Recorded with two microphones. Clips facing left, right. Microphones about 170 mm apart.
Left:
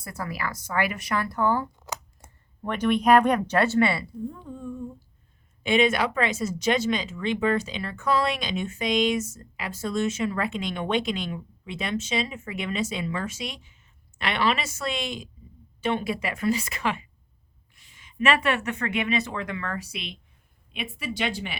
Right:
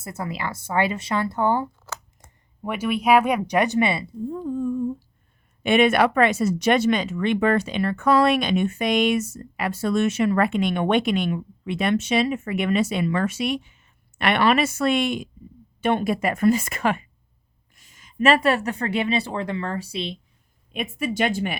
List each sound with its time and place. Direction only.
0.0 s speech: 25° right (ahead or behind)
1.8 s a sound: 15° left (ahead or behind)
2.6 s speech: 5° right (ahead or behind)
4.3 s speech: 40° right (ahead or behind)
5.6 s speech: 60° right (ahead or behind); by 20.1 s 30° right (ahead or behind)
20.7 s speech: 45° right (ahead or behind)